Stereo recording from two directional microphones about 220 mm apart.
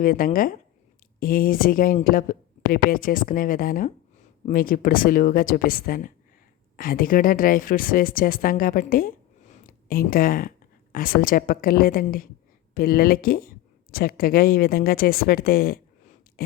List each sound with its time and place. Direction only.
0.0 s a woman's voice: 40° left (ahead or behind)